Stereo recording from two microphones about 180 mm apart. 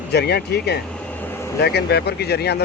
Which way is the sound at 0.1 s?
65° left (ahead or behind).